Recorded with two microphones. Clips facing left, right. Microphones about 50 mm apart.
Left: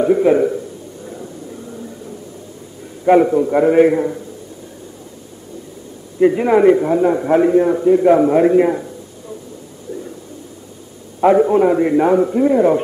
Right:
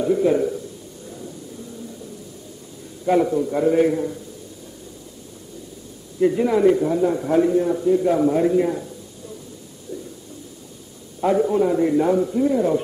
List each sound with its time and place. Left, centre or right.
0.0 s a man's voice: left
1.0 s a sound: left
3.1 s a man's voice: left
6.1 s a man's voice: left
11.1 s a man's voice: left